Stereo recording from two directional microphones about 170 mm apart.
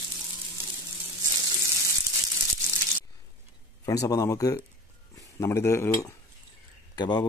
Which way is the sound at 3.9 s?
20° left (ahead or behind).